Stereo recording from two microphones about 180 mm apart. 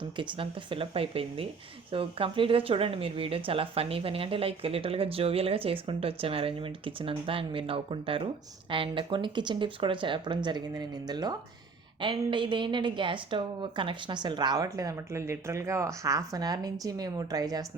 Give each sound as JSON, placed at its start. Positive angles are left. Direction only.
{"t": 0.2, "sound": "a woman's voice", "side_deg": -25}